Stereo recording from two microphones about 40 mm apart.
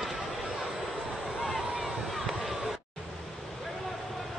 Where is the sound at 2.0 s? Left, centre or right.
Centre.